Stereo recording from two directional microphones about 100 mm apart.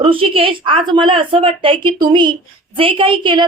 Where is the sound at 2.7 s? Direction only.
60° right (ahead or behind).